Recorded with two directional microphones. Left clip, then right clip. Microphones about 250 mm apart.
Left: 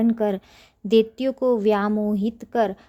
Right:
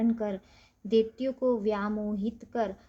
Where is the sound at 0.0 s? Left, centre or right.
Left.